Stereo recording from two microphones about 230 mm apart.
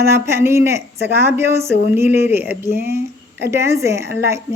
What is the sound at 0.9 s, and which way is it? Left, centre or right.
Speech, right.